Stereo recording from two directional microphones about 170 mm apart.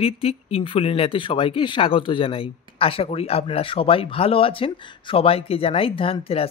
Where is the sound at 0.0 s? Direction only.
35° left (ahead or behind).